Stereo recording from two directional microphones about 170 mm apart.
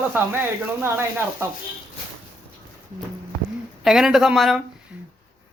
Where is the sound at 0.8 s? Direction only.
15° right (ahead or behind).